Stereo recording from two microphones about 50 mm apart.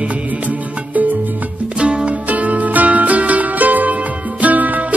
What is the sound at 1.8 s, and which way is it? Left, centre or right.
Music, right.